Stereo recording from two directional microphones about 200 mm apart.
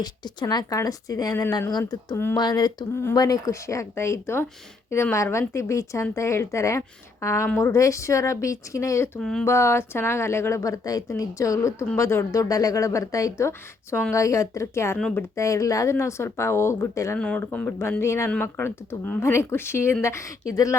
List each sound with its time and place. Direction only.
0.0 s speech: 20° left (ahead or behind)
9.2 s speech: 5° left (ahead or behind)
9.5 s speech: 15° left (ahead or behind)
14.9 s speech: 5° left (ahead or behind)
15.4 s speech: 15° left (ahead or behind)